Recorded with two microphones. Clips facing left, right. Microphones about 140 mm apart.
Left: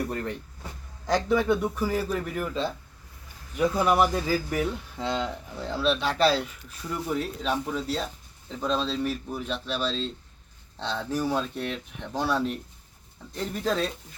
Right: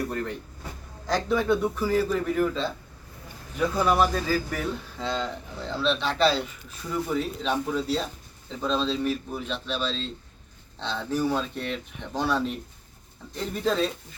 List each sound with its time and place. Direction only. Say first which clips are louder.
1.0 s speech: left 1 dB; 15° left (ahead or behind); by 13.9 s centre (ahead or behind)